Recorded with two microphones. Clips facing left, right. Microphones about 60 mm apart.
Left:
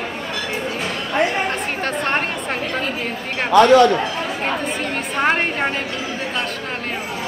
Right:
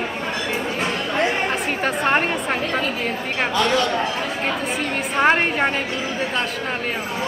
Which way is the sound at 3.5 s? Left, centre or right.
Left.